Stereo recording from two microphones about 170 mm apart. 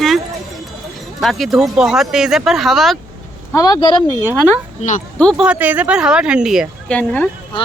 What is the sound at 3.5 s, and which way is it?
Speech, 25° left (ahead or behind).